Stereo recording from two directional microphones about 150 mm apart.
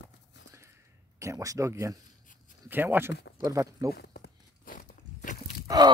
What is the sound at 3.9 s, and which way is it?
Walk, 90° left.